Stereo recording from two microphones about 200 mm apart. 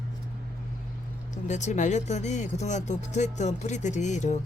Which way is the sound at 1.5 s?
35° left (ahead or behind).